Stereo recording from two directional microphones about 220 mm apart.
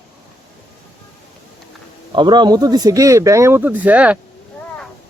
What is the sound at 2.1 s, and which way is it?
Speech, 20° right (ahead or behind).